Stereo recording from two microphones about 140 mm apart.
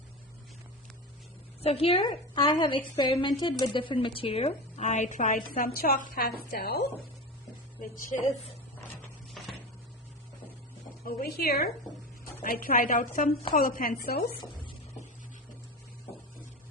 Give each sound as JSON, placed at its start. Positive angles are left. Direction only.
{"t": 1.6, "sound": "a woman's voice", "side_deg": 45}
{"t": 7.8, "sound": "a woman's voice", "side_deg": 70}
{"t": 11.0, "sound": "a woman's voice", "side_deg": 90}